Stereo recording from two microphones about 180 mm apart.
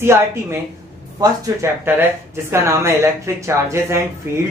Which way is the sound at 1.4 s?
15° right (ahead or behind).